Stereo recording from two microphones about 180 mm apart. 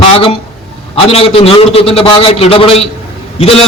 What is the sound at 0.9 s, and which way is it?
A man's voice, 30° left (ahead or behind).